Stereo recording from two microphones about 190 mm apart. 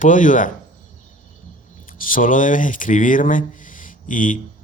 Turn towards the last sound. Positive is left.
turn(degrees=45)  # may be behind; listen again after turning